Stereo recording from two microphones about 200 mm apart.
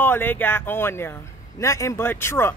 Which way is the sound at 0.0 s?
10° left (ahead or behind).